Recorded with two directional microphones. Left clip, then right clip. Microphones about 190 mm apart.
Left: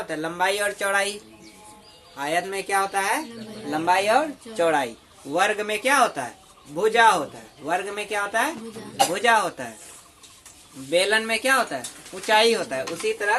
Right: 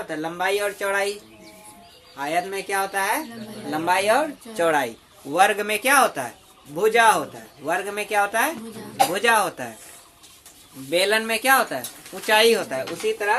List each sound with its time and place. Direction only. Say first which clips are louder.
0.1 s speech: even; 20° left (ahead or behind)
2.1 s speech: even; 25° left (ahead or behind); by 9.6 s 25° right (ahead or behind)
10.9 s speech: even; 15° right (ahead or behind)